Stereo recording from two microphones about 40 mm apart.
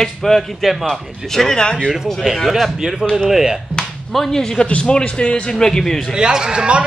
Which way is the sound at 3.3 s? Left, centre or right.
Centre.